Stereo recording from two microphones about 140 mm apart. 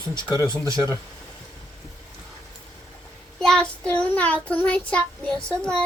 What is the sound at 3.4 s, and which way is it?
Child singing, 5° left (ahead or behind).